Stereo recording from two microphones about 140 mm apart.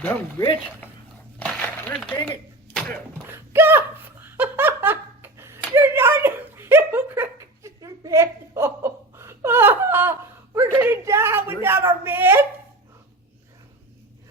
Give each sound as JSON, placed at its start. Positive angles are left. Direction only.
{"t": 0.0, "sound": "speech", "side_deg": 15}
{"t": 1.4, "sound": "a sound", "side_deg": 10}
{"t": 2.0, "sound": "speech", "side_deg": 5}
{"t": 3.2, "sound": "laughter", "side_deg": -15}
{"t": 11.6, "sound": "speech", "side_deg": -15}